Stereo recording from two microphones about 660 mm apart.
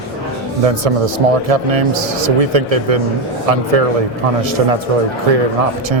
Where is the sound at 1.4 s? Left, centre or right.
Right.